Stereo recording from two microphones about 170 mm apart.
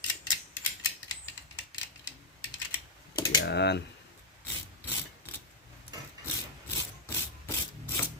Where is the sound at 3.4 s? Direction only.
90° left.